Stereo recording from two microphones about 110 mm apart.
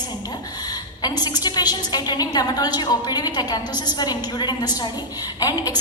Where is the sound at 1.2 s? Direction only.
40° left (ahead or behind).